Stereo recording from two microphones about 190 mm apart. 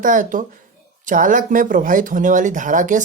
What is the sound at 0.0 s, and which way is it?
Speech, 45° right (ahead or behind).